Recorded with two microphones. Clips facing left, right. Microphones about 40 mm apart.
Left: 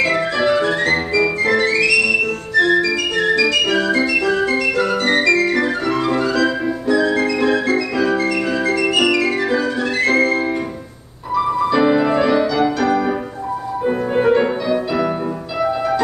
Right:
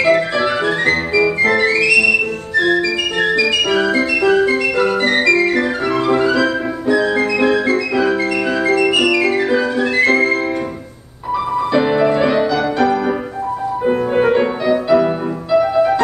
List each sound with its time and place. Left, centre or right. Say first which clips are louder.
0.0 s music: right 3 dB; centre
3.5 s music: right 1 dB; centre
11.7 s music: right 2 dB; centre